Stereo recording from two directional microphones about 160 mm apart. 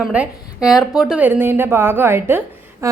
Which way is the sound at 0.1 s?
5° right (ahead or behind).